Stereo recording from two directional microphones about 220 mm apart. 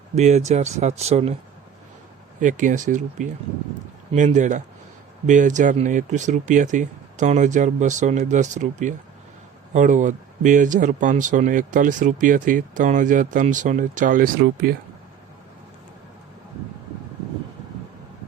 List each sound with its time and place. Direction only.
0.2 s speech: 30° right (ahead or behind)
2.4 s speech: 35° right (ahead or behind)